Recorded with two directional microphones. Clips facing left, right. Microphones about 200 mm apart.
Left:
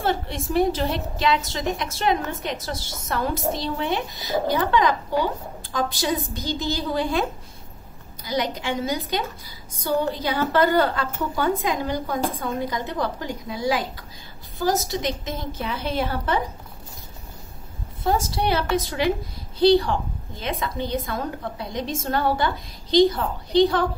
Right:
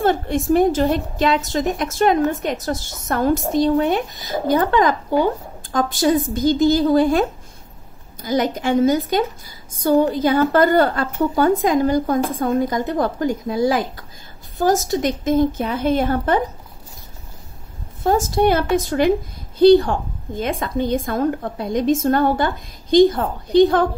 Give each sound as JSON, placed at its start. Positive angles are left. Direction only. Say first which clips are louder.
{"t": 0.0, "sound": "a woman's voice", "louder": "right 7 dB", "side_deg": -50}
{"t": 18.0, "sound": "a woman's voice", "louder": "right 7 dB", "side_deg": -45}